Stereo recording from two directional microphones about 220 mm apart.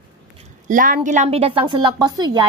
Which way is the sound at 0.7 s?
40° right (ahead or behind).